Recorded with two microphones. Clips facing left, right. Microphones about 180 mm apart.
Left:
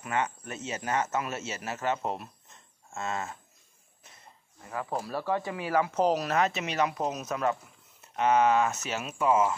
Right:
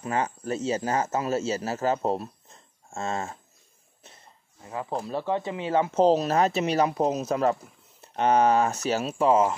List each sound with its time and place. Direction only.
0.0 s speech: 35° right (ahead or behind)
4.6 s speech: 20° right (ahead or behind)